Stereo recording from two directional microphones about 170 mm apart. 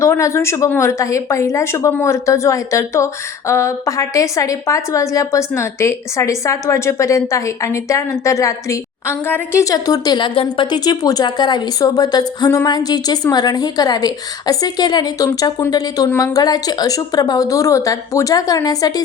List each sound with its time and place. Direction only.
0.0 s speech: 15° left (ahead or behind)